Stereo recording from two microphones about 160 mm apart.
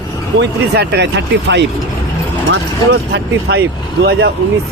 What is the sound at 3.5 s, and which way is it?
Speech, 90° right.